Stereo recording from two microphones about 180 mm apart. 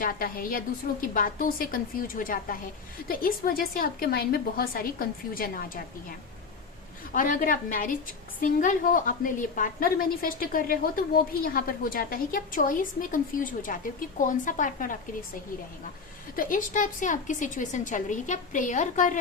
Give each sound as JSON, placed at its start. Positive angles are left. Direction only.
{"t": 0.0, "sound": "a woman's voice", "side_deg": 55}
{"t": 16.3, "sound": "a woman's voice", "side_deg": 50}